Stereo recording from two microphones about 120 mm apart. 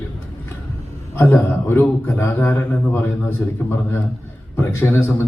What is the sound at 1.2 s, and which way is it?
A man's voice, 20° left (ahead or behind).